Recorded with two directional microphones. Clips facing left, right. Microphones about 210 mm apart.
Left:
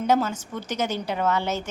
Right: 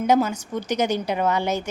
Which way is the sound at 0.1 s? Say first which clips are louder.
Right 3 dB; 15° right (ahead or behind).